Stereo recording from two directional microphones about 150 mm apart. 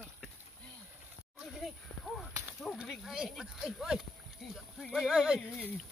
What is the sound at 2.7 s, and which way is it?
Speech, 5° right (ahead or behind).